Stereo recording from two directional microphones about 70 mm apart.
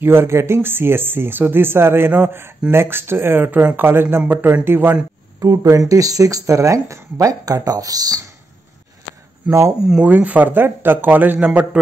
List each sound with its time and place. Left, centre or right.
0.0 s speech: right
5.4 s speech: right
9.5 s speech: right